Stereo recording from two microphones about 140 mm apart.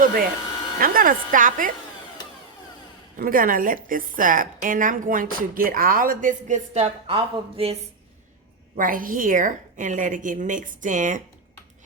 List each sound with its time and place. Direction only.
0.0 s a woman's voice: 90° right; by 1.7 s 70° right (ahead or behind)
3.2 s a woman's voice: 90° right
6.7 s a woman's voice: 45° right (ahead or behind)
8.7 s a woman's voice: 80° right